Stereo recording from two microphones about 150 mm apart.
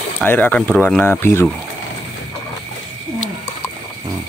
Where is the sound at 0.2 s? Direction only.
10° left (ahead or behind).